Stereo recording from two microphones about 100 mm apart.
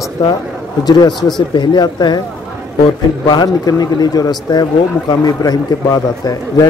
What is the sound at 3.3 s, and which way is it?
A man's voice, 45° left (ahead or behind).